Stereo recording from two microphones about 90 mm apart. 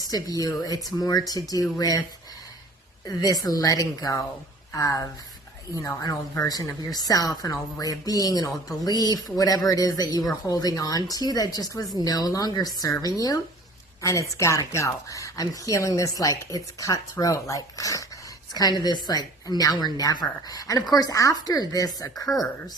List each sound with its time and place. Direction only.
0.1 s speech: 45° left (ahead or behind)
3.1 s speech: 45° left (ahead or behind)
18.8 s speech: 50° left (ahead or behind)
22.3 s speech: centre (ahead or behind)